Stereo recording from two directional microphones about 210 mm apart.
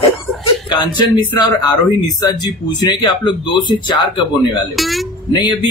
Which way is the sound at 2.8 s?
20° left (ahead or behind).